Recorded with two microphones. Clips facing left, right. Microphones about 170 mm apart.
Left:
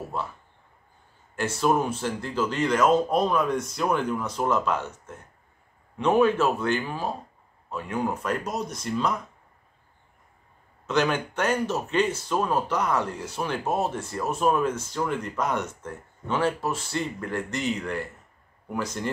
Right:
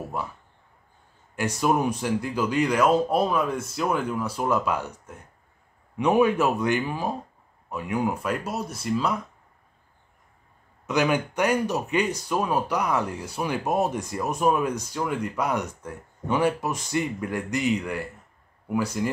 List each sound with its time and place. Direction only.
1.3 s speech: 15° right (ahead or behind)
10.9 s speech: 10° right (ahead or behind)